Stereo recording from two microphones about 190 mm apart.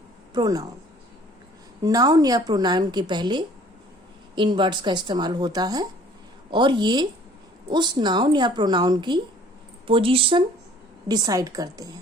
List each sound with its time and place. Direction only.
0.3 s a woman's voice: 20° right (ahead or behind)
1.8 s a woman's voice: 20° right (ahead or behind)